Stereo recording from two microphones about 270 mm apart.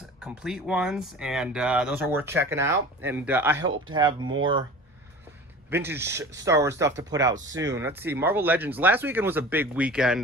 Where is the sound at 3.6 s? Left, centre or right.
Right.